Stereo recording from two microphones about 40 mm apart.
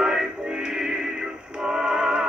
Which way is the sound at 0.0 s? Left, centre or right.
Centre.